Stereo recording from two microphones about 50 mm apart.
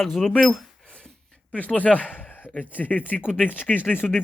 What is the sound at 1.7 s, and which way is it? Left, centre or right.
Speech, left.